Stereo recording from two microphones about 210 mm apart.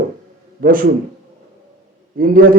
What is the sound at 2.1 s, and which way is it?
Speech, 45° right (ahead or behind).